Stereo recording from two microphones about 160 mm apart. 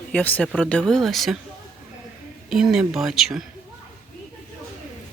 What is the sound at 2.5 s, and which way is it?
Speech, 5° right (ahead or behind).